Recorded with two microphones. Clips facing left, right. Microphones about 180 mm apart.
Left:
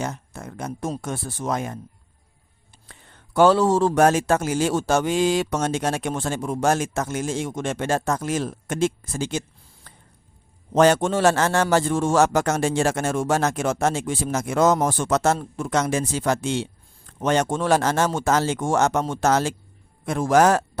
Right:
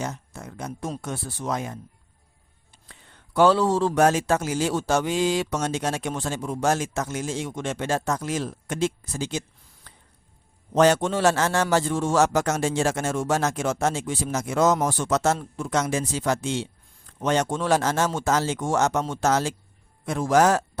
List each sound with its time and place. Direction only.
0.0 s a man's voice: 55° left (ahead or behind)
2.9 s a man's voice: 45° left (ahead or behind)
9.9 s squish: 45° left (ahead or behind)
10.8 s a man's voice: 50° left (ahead or behind)